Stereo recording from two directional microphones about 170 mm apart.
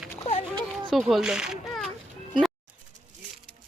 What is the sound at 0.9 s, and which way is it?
A child's voice, centre (ahead or behind).